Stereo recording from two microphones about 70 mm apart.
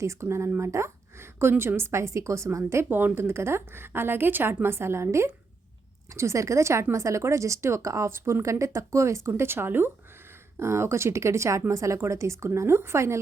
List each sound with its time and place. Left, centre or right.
0.0 s speech: right
2.9 s speech: right
9.3 s speech: right